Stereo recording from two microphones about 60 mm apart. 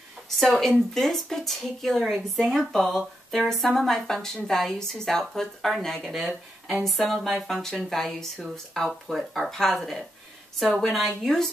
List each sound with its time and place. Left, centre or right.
0.4 s a woman's voice: centre